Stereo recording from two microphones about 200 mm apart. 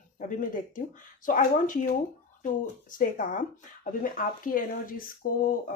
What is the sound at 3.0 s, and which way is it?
Speech, 40° left (ahead or behind).